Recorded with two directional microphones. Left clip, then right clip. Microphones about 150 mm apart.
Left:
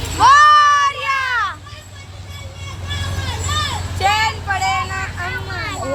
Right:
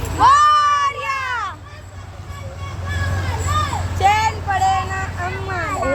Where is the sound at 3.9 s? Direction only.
20° right (ahead or behind).